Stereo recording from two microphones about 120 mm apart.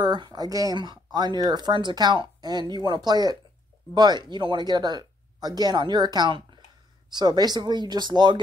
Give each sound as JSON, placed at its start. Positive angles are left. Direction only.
{"t": 0.0, "sound": "speech", "side_deg": -35}